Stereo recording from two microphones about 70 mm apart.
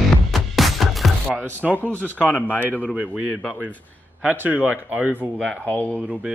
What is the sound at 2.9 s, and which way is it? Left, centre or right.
Speech, centre.